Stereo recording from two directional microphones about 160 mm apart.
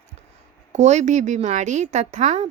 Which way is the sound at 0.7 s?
45° right (ahead or behind).